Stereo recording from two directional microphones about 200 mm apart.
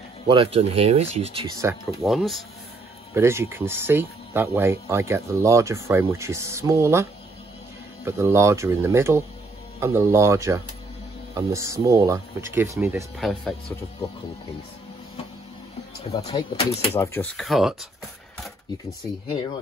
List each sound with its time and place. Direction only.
0.3 s speech: 25° right (ahead or behind)
1.6 s speech: 15° right (ahead or behind)
2.0 s speech: centre (ahead or behind)
3.2 s speech: 15° right (ahead or behind)
13.2 s speech: centre (ahead or behind)
16.1 s speech: 20° left (ahead or behind)
16.9 s speech: 10° left (ahead or behind)